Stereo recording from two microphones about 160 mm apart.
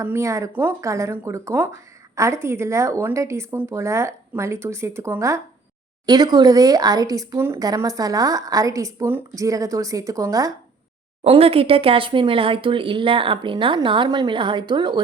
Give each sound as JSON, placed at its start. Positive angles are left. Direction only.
{"t": 0.0, "sound": "speech", "side_deg": -15}
{"t": 11.2, "sound": "speech", "side_deg": -35}